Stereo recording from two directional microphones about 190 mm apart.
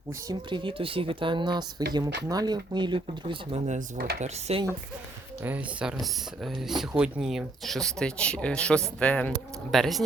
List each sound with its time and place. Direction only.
0.3 s speech: 25° right (ahead or behind)
3.7 s speech: 40° right (ahead or behind)
5.4 s speech: 10° right (ahead or behind)